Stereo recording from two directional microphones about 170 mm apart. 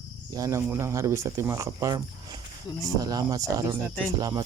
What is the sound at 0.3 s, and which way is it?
Speech, 20° right (ahead or behind).